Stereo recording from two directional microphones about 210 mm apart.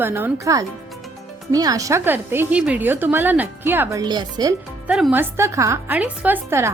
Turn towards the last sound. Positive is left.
turn(degrees=-10)  # may be behind; listen again after turning